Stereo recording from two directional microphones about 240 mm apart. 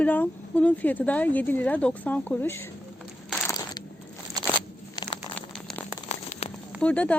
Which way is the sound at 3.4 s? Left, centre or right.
Centre.